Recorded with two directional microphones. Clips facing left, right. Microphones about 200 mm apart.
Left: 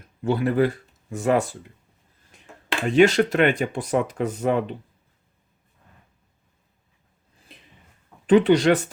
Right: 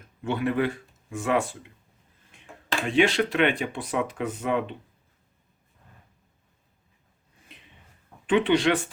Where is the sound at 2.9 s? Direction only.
45° left (ahead or behind).